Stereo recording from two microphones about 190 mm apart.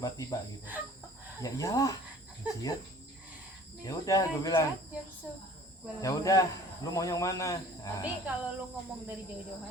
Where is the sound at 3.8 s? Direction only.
20° left (ahead or behind).